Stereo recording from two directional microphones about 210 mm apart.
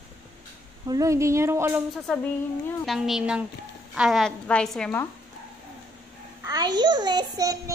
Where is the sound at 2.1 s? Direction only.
Centre (ahead or behind).